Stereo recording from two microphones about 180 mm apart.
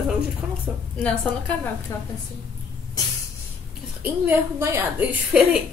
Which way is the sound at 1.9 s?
15° left (ahead or behind).